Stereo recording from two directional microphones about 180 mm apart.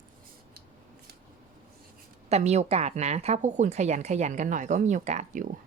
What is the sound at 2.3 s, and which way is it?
Speech, 40° right (ahead or behind).